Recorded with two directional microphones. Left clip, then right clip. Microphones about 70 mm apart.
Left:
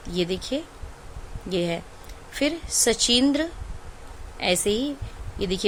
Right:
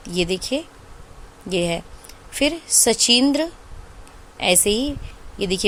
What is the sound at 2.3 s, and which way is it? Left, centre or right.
A woman's voice, right.